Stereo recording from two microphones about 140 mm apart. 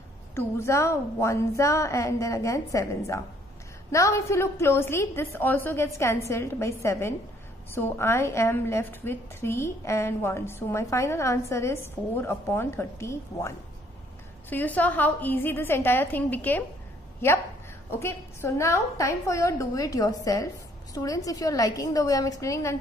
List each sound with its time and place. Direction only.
0.3 s a woman's voice: 20° left (ahead or behind)
3.9 s a woman's voice: 20° left (ahead or behind)
14.5 s a woman's voice: 10° left (ahead or behind)